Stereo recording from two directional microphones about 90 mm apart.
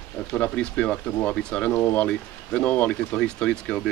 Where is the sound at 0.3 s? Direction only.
10° left (ahead or behind).